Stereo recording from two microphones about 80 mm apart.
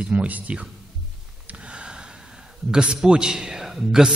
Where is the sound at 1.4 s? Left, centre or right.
Centre.